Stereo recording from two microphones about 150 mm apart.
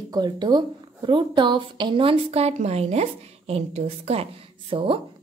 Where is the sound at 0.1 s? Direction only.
30° right (ahead or behind).